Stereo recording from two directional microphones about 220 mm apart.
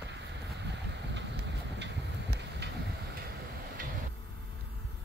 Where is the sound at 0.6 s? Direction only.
50° right (ahead or behind).